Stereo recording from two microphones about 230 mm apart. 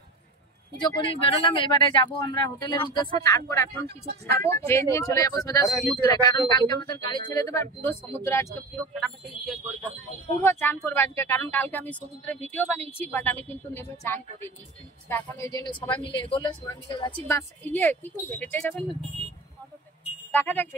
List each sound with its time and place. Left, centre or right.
0.7 s speech: centre
3.8 s speech: right
4.6 s speech: centre
20.2 s speech: centre